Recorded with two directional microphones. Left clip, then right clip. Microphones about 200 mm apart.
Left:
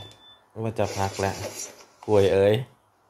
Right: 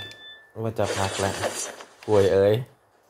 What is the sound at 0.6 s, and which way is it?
Speech, 5° right (ahead or behind).